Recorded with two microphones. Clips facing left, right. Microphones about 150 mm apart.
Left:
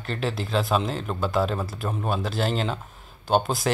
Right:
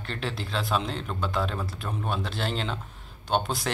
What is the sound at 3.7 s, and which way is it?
Speech, 10° left (ahead or behind).